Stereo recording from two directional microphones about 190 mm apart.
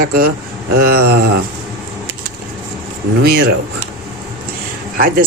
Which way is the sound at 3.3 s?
55° right (ahead or behind).